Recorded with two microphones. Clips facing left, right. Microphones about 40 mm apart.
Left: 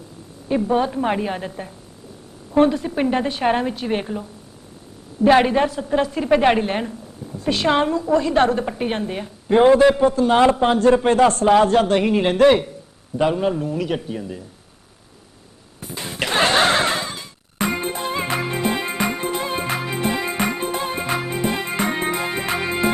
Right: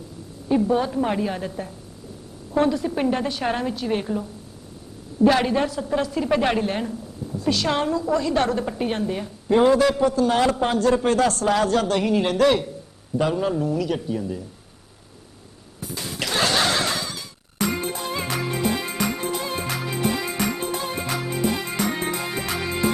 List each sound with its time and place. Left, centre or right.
0.7 s a woman's voice: left
15.8 s music: left